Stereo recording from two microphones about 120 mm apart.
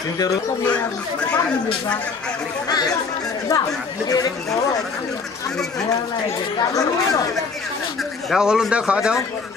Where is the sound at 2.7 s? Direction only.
35° left (ahead or behind).